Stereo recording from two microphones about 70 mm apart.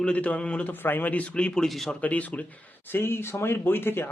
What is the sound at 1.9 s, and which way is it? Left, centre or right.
Speech, left.